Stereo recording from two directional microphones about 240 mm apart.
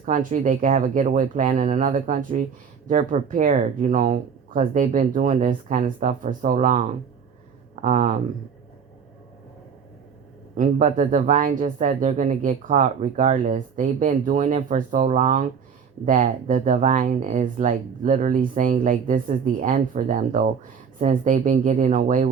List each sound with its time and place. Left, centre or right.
0.0 s speech: right
10.5 s speech: right